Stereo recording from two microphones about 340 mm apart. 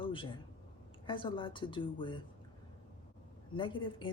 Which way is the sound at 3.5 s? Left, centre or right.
Centre.